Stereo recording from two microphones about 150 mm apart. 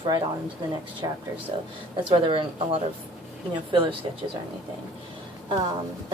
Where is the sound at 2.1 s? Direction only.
35° right (ahead or behind).